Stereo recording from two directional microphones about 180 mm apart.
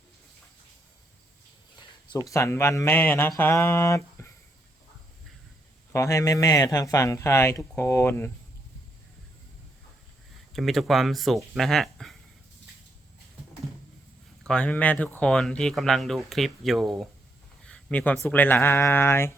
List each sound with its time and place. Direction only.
2.3 s speech: 15° left (ahead or behind)
5.9 s speech: 15° left (ahead or behind)
10.5 s speech: centre (ahead or behind)
14.4 s speech: 5° left (ahead or behind)